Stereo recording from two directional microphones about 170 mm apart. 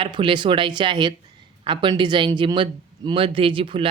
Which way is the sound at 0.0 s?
30° right (ahead or behind).